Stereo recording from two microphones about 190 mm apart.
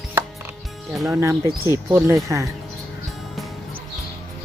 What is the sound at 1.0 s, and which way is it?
Speech, 10° right (ahead or behind).